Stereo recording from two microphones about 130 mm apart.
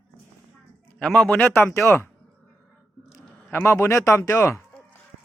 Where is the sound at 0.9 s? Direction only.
5° left (ahead or behind).